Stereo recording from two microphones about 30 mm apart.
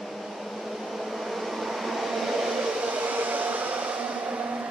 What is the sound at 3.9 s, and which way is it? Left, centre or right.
Music, right.